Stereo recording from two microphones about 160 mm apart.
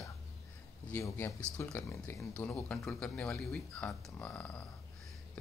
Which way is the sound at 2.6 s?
5° left (ahead or behind).